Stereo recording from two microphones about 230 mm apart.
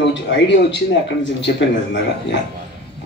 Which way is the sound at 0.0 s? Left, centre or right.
Left.